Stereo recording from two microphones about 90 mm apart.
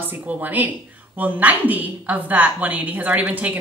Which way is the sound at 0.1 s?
20° right (ahead or behind).